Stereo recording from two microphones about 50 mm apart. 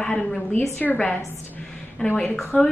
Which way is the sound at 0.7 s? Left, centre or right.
Left.